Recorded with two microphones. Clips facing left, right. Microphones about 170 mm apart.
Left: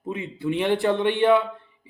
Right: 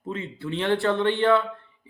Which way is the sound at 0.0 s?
15° left (ahead or behind).